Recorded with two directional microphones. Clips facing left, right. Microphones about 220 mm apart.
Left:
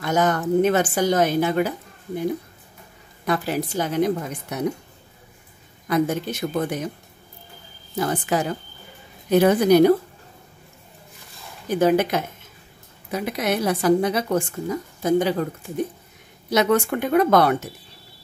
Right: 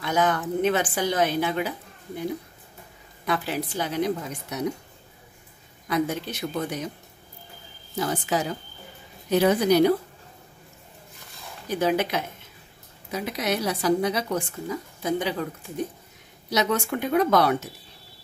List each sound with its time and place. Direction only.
0.0 s a woman's voice: 45° left (ahead or behind)
3.3 s a woman's voice: 45° left (ahead or behind)
5.9 s a woman's voice: 50° left (ahead or behind)
8.0 s a woman's voice: 55° left (ahead or behind)
11.8 s a woman's voice: 50° left (ahead or behind)
16.4 s a woman's voice: 55° left (ahead or behind)